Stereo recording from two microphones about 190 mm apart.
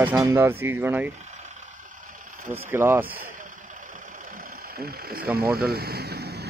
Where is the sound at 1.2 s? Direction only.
40° right (ahead or behind).